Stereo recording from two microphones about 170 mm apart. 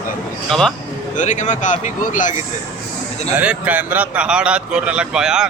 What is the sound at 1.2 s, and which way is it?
Speech, 45° left (ahead or behind).